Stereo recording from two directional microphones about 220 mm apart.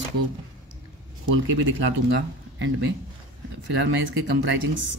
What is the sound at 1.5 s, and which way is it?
Speech, 60° right (ahead or behind).